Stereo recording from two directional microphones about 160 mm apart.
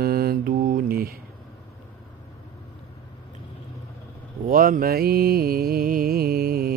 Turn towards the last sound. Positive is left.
turn(degrees=-70)  # may be behind; listen again after turning